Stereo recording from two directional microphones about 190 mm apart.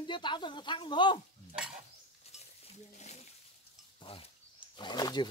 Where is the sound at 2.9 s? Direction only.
35° left (ahead or behind).